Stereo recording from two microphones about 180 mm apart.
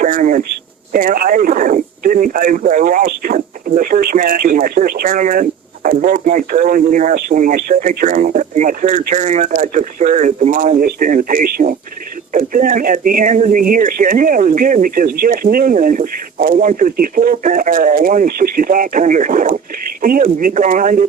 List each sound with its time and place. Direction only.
0.0 s speech: 45° right (ahead or behind)